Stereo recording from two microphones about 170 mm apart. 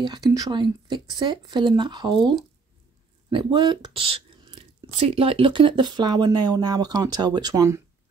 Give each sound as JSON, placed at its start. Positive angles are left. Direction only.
{"t": 0.0, "sound": "speech", "side_deg": -20}